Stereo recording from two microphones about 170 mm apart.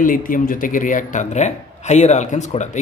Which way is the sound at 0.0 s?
55° left (ahead or behind).